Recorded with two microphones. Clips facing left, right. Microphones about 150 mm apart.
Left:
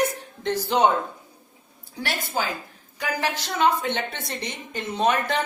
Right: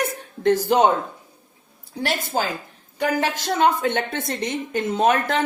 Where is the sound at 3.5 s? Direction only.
50° right (ahead or behind).